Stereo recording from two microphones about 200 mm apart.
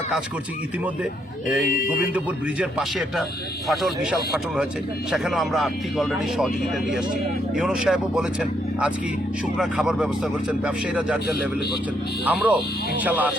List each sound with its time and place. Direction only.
1.6 s speech: 45° left (ahead or behind)
2.1 s speech: 5° right (ahead or behind)
5.1 s speech: centre (ahead or behind)
7.5 s speech: 5° right (ahead or behind)
12.2 s speech: 5° right (ahead or behind)